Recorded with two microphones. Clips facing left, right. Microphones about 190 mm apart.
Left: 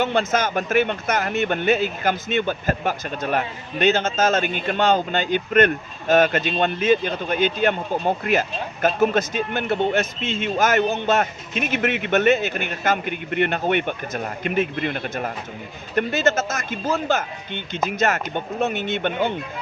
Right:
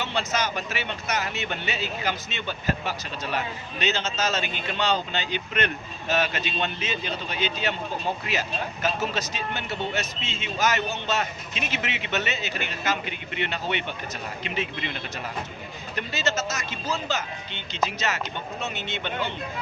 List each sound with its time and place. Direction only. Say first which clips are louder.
0.0 s speech: left 7 dB; 50° left (ahead or behind)